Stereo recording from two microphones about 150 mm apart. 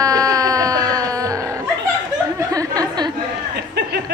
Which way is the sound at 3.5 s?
90° right.